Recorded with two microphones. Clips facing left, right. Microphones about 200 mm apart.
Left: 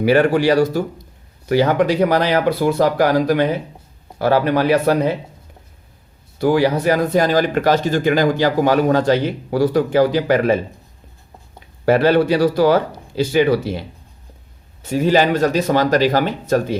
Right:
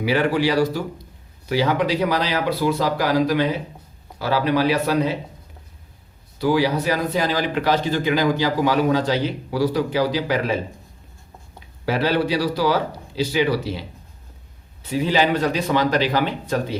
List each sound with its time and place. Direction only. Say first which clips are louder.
0.0 s speech: left 5 dB; 50° left (ahead or behind)
6.4 s speech: left 4 dB; 50° left (ahead or behind)
11.9 s speech: left 7 dB; 55° left (ahead or behind)